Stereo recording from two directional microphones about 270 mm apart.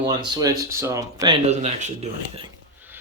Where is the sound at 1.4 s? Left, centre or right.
Right.